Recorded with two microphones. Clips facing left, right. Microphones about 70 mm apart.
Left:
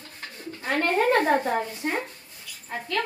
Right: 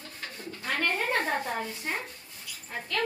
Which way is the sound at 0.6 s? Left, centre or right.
Left.